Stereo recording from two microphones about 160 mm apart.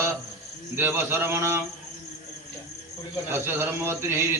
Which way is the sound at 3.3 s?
15° right (ahead or behind).